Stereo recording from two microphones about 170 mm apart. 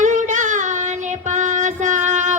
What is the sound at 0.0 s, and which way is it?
Child singing, 45° right (ahead or behind).